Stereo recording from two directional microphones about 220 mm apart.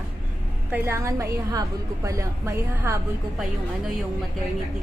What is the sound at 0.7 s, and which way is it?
Speech, 10° right (ahead or behind).